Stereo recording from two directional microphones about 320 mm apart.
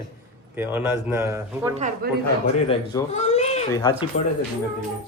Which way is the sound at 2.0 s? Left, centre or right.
Right.